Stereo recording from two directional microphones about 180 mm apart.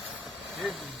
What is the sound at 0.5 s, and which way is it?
Vehicle, centre (ahead or behind).